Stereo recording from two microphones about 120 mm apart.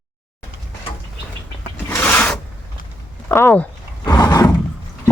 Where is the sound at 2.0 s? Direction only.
15° left (ahead or behind).